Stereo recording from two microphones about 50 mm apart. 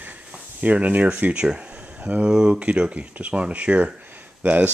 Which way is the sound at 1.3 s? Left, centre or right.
Centre.